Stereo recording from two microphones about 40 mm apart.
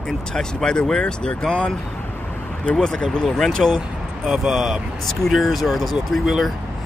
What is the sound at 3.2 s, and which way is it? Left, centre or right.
Speech, centre.